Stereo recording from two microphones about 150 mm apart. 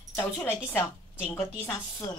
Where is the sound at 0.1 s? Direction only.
15° left (ahead or behind).